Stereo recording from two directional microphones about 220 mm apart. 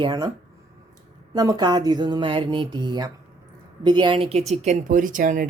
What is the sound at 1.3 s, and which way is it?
Speech, 20° right (ahead or behind).